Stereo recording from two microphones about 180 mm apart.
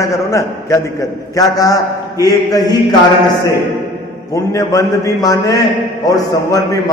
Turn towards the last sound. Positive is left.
turn(degrees=20)  # may be behind; listen again after turning